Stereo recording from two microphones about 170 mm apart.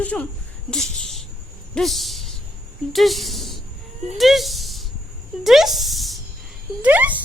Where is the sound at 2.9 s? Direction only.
Centre (ahead or behind).